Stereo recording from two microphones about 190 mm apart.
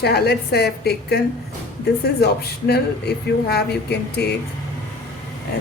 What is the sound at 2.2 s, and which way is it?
A woman's voice, 55° left (ahead or behind).